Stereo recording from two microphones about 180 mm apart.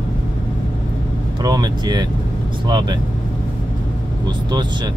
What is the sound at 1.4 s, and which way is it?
Speech, 20° right (ahead or behind).